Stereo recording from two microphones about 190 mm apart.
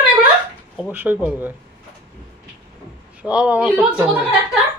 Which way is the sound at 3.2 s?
5° right (ahead or behind).